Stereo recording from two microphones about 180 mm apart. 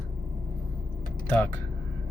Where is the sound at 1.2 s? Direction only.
10° left (ahead or behind).